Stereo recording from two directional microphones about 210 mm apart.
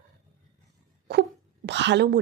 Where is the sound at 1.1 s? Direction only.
50° right (ahead or behind).